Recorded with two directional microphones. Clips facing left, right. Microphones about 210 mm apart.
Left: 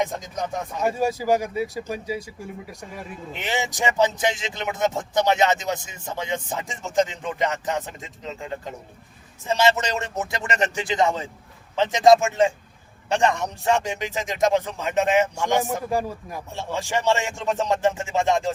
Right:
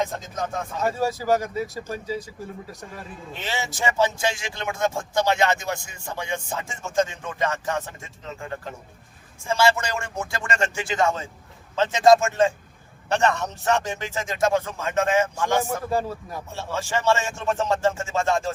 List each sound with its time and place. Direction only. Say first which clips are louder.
0.0 s speech: left 1 dB; 15° left (ahead or behind)